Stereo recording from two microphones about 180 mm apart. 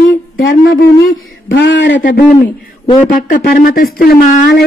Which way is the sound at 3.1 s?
55° left (ahead or behind).